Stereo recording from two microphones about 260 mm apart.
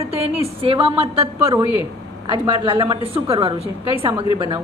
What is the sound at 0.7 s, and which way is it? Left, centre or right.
Speech, right.